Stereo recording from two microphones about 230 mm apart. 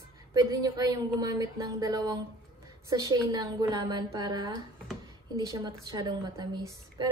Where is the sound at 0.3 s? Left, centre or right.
Centre.